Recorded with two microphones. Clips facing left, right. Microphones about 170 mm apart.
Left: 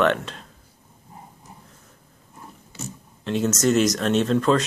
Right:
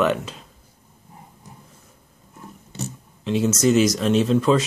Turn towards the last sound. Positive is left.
turn(degrees=-5)  # may be behind; listen again after turning